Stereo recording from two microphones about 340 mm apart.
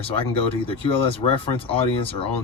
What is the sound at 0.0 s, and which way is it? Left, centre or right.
Speech, centre.